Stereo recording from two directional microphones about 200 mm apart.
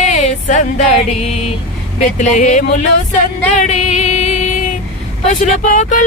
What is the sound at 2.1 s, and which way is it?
Speech, 35° left (ahead or behind).